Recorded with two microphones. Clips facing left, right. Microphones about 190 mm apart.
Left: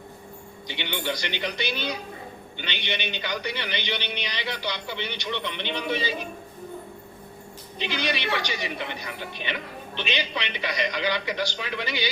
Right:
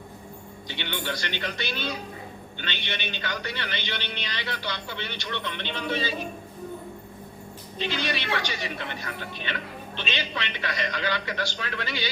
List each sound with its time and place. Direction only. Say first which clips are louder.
0.7 s a man's voice: left 2 dB; 15° left (ahead or behind)
7.8 s a man's voice: left 1 dB; 15° left (ahead or behind)